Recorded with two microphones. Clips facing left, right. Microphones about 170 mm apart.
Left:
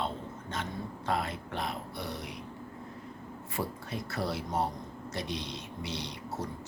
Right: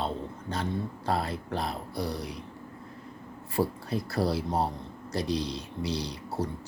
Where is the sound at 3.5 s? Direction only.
35° right (ahead or behind).